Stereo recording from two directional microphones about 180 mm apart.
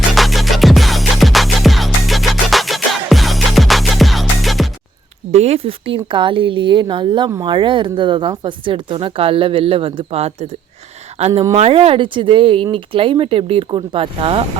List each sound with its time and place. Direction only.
0.1 s music: centre (ahead or behind)
5.3 s speech: 35° right (ahead or behind)
11.3 s speech: 20° right (ahead or behind)
11.5 s speech: 35° right (ahead or behind)